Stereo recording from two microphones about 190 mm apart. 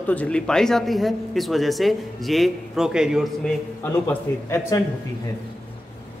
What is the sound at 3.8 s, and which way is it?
A man's voice, 15° left (ahead or behind).